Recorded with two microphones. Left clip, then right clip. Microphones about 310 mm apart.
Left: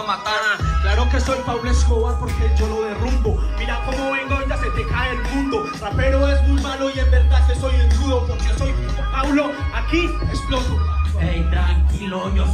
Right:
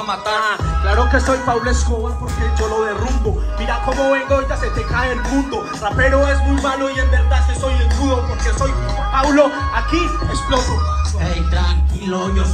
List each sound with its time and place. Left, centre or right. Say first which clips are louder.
0.8 s speech: right 7 dB; right
3.6 s music: right 7 dB; right
9.1 s speech: right 7 dB; right